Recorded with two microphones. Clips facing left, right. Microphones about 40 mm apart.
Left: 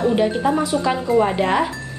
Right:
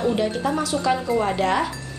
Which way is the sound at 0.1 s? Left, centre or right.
Centre.